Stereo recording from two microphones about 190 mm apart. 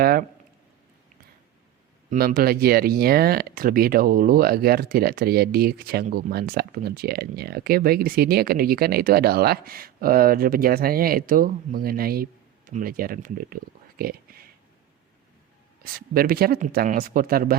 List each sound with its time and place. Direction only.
0.0 s speech: 50° right (ahead or behind)
2.0 s speech: 50° right (ahead or behind)
14.0 s a sound: 50° right (ahead or behind)
15.8 s speech: 50° right (ahead or behind)